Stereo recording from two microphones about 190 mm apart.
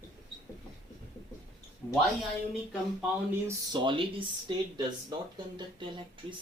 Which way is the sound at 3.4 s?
25° right (ahead or behind).